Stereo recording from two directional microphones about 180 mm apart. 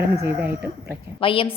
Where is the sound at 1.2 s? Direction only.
30° left (ahead or behind).